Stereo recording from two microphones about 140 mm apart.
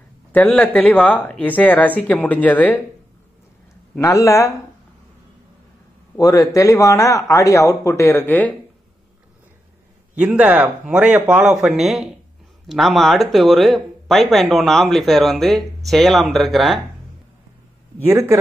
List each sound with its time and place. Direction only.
0.3 s speech: 10° left (ahead or behind)
4.0 s speech: 20° left (ahead or behind)
6.1 s speech: 25° left (ahead or behind)
10.1 s speech: 10° right (ahead or behind)
18.0 s a man's voice: 20° right (ahead or behind)